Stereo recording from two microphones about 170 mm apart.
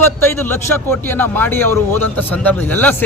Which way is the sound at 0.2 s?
15° left (ahead or behind).